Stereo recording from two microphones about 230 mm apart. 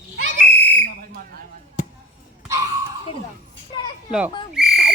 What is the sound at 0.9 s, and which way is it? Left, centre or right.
Whistle, right.